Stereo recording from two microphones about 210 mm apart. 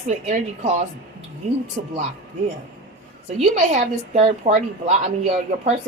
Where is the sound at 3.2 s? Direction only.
35° right (ahead or behind).